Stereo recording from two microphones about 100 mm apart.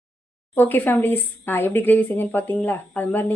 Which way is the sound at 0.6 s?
20° left (ahead or behind).